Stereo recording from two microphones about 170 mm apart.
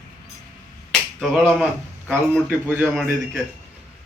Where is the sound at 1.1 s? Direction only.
Centre (ahead or behind).